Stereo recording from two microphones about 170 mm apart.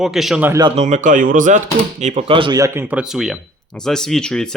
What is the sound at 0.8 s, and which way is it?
Speech, 45° right (ahead or behind).